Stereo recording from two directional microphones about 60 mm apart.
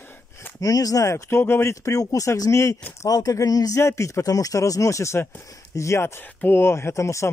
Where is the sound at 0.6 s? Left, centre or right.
Left.